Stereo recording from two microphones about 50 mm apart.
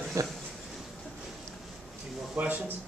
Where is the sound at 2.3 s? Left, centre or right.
Right.